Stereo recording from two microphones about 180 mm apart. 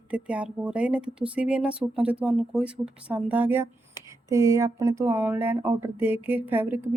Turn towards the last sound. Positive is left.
turn(degrees=-10)  # may be behind; listen again after turning